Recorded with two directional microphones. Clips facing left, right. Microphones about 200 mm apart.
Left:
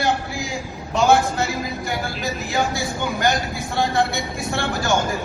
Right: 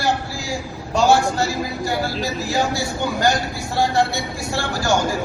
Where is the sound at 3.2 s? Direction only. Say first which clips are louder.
Right 1 dB; 20° left (ahead or behind).